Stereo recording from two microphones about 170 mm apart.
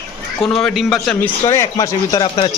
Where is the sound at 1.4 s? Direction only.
20° left (ahead or behind).